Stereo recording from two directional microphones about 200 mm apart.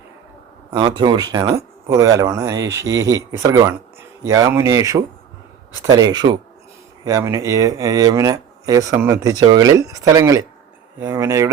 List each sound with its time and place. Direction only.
0.7 s speech: 20° right (ahead or behind)